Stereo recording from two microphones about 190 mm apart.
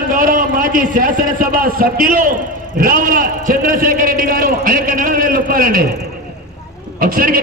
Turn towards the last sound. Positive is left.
turn(degrees=-50)  # may be behind; listen again after turning